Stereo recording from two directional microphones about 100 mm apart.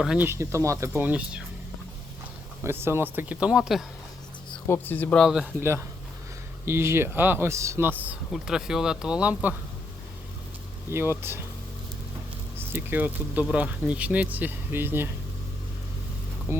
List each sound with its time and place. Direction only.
0.2 s speech: 25° right (ahead or behind)
1.0 s speech: 15° right (ahead or behind)
2.6 s speech: 25° right (ahead or behind); by 3.8 s 5° right (ahead or behind)
4.6 s speech: 20° left (ahead or behind)
5.5 s speech: 25° right (ahead or behind)
8.3 s speech: 5° right (ahead or behind)
10.9 s speech: 25° right (ahead or behind)
12.5 s speech: 20° right (ahead or behind)
16.5 s speech: 25° right (ahead or behind)